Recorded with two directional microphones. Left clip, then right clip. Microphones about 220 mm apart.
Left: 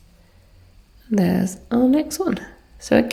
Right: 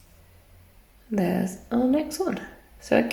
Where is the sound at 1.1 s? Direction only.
40° left (ahead or behind).